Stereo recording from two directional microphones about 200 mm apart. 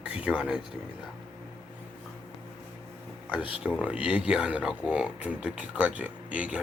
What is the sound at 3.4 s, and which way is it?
Speech, 25° left (ahead or behind).